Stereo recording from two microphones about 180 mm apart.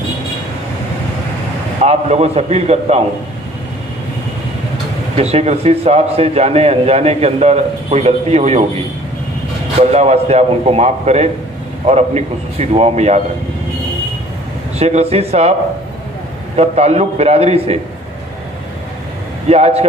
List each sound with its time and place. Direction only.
1.9 s a man's voice: 35° right (ahead or behind)
5.1 s a man's voice: 35° right (ahead or behind)
14.8 s a man's voice: 35° right (ahead or behind)
16.5 s a man's voice: 35° right (ahead or behind)
19.5 s a man's voice: 35° right (ahead or behind)